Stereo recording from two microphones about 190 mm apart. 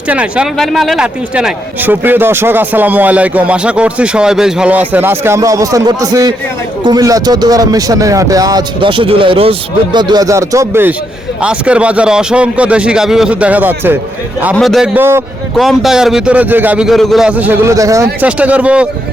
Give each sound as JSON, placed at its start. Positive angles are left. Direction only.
{"t": 0.1, "sound": "a man's voice", "side_deg": -5}
{"t": 14.5, "sound": "a man's voice", "side_deg": 0}
{"t": 14.9, "sound": "speech", "side_deg": -10}
{"t": 15.5, "sound": "speech", "side_deg": 0}